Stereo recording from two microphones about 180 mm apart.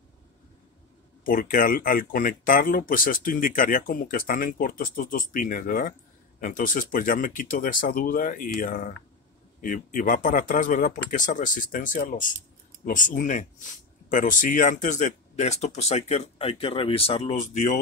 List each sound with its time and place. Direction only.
1.2 s speech: 50° left (ahead or behind)